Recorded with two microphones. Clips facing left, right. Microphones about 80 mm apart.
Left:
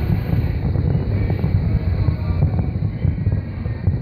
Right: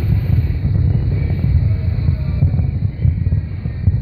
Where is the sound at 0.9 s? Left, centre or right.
Left.